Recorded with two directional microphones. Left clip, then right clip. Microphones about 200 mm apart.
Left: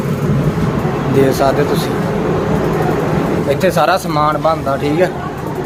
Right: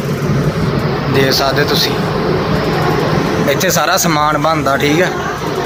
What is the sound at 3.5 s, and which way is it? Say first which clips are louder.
Speech: left 1 dB; centre (ahead or behind).